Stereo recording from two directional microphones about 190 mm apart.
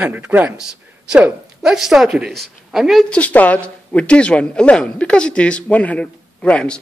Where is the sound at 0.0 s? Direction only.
10° right (ahead or behind).